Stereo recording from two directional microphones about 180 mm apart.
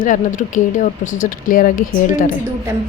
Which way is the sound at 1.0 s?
90° left.